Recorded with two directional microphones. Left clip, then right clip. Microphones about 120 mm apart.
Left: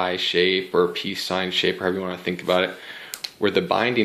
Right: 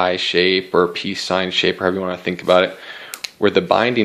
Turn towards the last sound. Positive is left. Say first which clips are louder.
# right 5 dB
turn(degrees=-45)  # may be behind; listen again after turning